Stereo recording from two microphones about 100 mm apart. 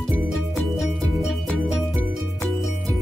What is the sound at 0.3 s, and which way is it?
Music, centre (ahead or behind).